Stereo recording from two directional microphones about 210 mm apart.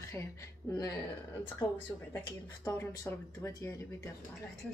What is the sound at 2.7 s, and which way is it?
Speech, 15° left (ahead or behind).